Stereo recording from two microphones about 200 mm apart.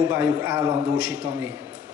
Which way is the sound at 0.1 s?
15° right (ahead or behind).